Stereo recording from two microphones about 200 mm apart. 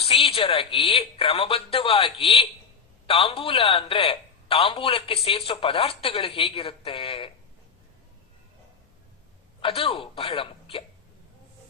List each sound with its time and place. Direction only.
0.0 s speech: 30° left (ahead or behind)
9.6 s speech: 30° left (ahead or behind)